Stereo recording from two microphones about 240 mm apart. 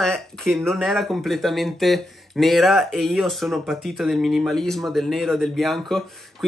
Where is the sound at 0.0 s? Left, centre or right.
Centre.